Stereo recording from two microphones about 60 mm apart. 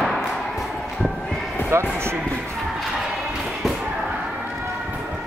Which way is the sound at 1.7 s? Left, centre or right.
Right.